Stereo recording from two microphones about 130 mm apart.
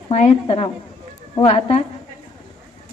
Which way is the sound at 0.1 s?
50° left (ahead or behind).